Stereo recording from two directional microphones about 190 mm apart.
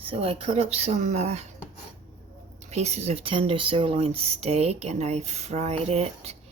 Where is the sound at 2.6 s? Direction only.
35° right (ahead or behind).